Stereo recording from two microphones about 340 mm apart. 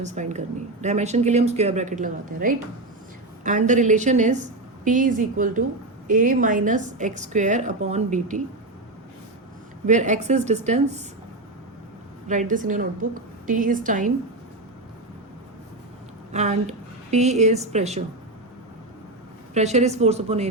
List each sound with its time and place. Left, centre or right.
0.0 s speech: right
9.8 s speech: right
12.3 s speech: right
16.3 s a woman's voice: centre
19.5 s speech: centre